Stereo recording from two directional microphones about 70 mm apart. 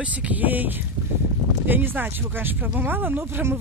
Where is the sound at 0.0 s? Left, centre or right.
Centre.